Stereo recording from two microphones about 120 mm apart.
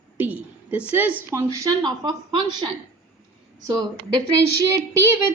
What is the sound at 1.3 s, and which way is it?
Speech, 25° right (ahead or behind).